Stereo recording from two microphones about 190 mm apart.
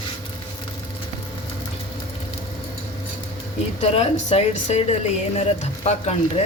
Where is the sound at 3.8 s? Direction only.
35° left (ahead or behind).